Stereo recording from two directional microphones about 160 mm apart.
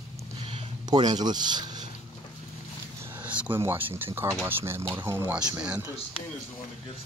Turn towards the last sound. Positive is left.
turn(degrees=-10)  # may be behind; listen again after turning